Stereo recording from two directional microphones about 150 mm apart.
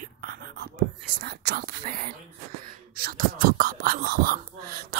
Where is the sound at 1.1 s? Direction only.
90° right.